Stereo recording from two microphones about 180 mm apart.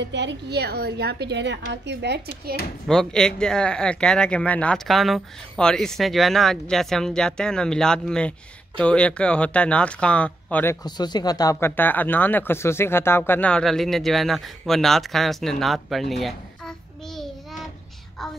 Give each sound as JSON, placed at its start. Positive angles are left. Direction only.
{"t": 0.0, "sound": "a woman's voice", "side_deg": -75}
{"t": 2.9, "sound": "speech", "side_deg": 5}
{"t": 18.2, "sound": "a sound", "side_deg": 0}